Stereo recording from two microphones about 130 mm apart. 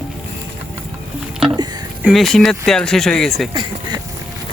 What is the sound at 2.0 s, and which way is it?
Speech, 5° left (ahead or behind).